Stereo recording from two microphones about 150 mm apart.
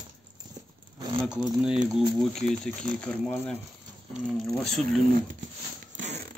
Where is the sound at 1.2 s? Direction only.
5° right (ahead or behind).